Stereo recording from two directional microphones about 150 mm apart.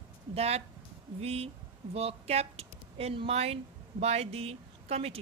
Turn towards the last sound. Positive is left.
turn(degrees=-45)  # may be behind; listen again after turning